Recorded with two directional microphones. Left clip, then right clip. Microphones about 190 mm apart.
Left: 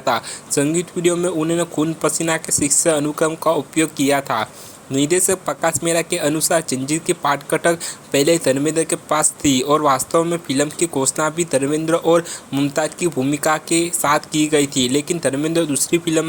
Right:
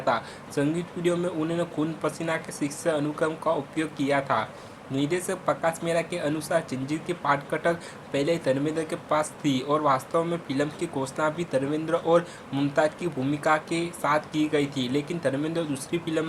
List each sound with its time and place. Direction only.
0.0 s speech: 45° left (ahead or behind)